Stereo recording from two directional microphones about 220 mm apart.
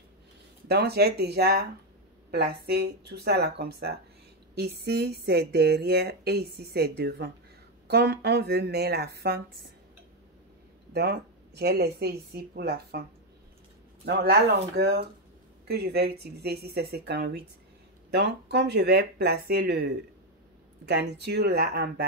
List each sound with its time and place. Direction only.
0.7 s speech: 45° right (ahead or behind)
10.9 s speech: 45° right (ahead or behind)
14.0 s speech: 45° right (ahead or behind)